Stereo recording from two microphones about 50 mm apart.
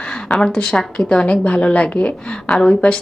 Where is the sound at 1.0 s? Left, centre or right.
Left.